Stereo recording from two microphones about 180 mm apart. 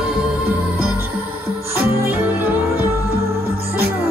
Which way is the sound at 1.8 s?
10° right (ahead or behind).